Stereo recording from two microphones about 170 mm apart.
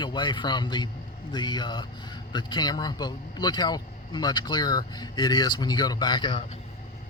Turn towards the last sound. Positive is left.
turn(degrees=30)  # may be behind; listen again after turning